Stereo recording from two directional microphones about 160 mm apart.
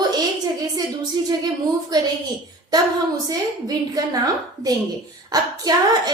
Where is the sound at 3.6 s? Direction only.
25° right (ahead or behind).